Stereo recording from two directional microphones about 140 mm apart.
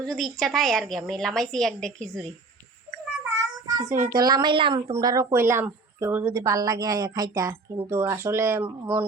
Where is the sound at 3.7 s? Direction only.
20° right (ahead or behind); by 4.9 s 35° right (ahead or behind).